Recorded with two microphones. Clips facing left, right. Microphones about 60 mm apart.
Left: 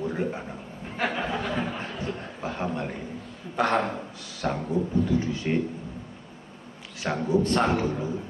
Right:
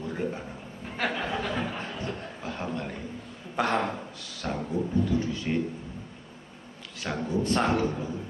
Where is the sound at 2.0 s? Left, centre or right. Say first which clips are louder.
Left 3 dB; left.